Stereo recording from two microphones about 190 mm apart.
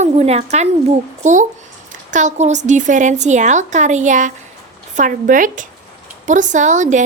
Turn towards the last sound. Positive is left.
turn(degrees=-40)  # may be behind; listen again after turning